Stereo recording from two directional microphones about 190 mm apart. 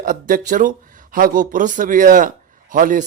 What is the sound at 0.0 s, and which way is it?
Speech, 45° right (ahead or behind).